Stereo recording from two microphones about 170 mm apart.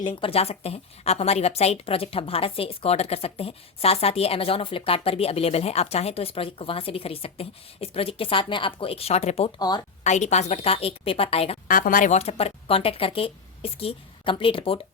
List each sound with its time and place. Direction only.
0.1 s a woman's voice: 35° left (ahead or behind)
9.6 s speech: 25° left (ahead or behind)
10.0 s a woman's voice: 45° left (ahead or behind)
11.7 s a woman's voice: 55° left (ahead or behind); by 14.8 s 30° left (ahead or behind)